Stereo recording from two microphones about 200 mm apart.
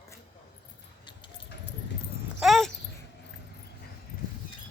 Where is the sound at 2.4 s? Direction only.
Centre (ahead or behind).